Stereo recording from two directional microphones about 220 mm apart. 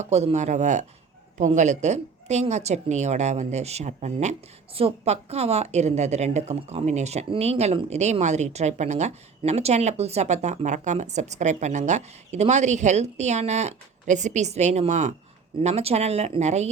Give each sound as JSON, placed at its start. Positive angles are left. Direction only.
{"t": 0.0, "sound": "a woman's voice", "side_deg": -30}